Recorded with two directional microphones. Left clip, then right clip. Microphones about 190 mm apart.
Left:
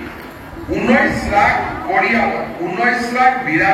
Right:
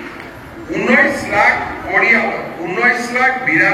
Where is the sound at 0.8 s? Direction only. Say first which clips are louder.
Right 2 dB; 40° right (ahead or behind).